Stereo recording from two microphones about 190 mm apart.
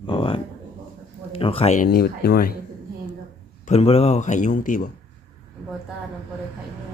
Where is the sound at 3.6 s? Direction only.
35° left (ahead or behind).